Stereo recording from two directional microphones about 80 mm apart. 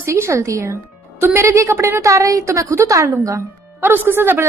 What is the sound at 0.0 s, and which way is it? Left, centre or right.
A woman's voice, right.